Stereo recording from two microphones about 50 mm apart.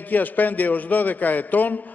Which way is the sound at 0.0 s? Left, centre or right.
Left.